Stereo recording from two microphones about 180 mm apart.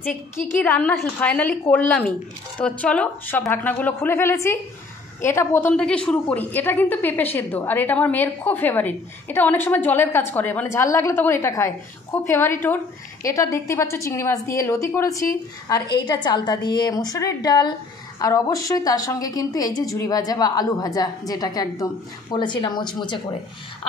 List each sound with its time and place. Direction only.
0.5 s a woman's voice: 10° left (ahead or behind); by 23.2 s 25° left (ahead or behind)